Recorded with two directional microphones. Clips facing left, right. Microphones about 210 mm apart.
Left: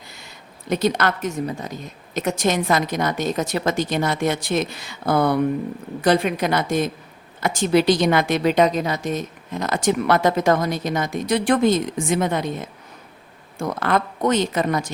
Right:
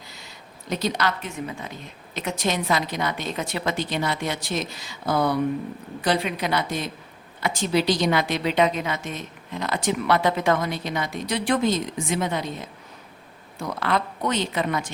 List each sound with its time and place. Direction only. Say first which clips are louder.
0.7 s a woman's voice: left 5 dB; 55° left (ahead or behind)